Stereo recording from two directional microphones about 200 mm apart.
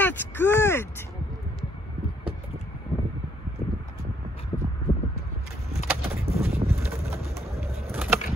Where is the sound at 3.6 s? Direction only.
40° left (ahead or behind).